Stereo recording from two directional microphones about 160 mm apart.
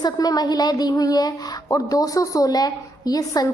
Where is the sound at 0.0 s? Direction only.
25° left (ahead or behind).